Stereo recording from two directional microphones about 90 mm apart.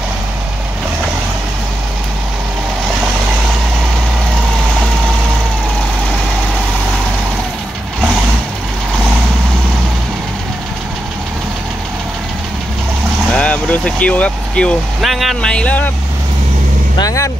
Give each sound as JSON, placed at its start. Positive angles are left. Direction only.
{"t": 13.3, "sound": "speech", "side_deg": 15}
{"t": 15.0, "sound": "speech", "side_deg": 0}
{"t": 15.5, "sound": "speech", "side_deg": 15}
{"t": 17.0, "sound": "speech", "side_deg": 35}